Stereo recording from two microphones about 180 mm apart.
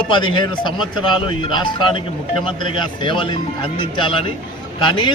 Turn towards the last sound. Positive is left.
turn(degrees=25)  # may be behind; listen again after turning